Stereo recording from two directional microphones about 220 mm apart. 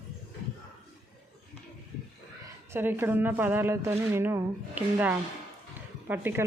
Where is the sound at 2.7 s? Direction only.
10° right (ahead or behind).